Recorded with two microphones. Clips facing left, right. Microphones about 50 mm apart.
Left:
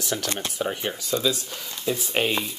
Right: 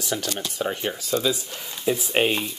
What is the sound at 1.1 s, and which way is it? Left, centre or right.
Speech, centre.